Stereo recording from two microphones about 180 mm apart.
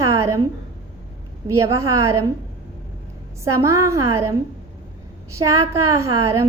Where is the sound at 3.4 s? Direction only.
15° right (ahead or behind).